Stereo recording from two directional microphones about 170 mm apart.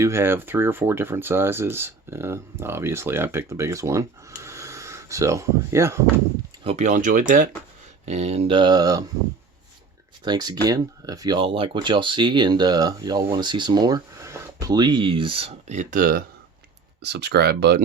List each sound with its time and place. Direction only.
0.0 s speech: 15° right (ahead or behind)
6.7 s speech: 45° right (ahead or behind); by 9.0 s 20° right (ahead or behind)
10.2 s speech: 25° right (ahead or behind); by 16.2 s 55° right (ahead or behind)
17.0 s speech: 75° right (ahead or behind)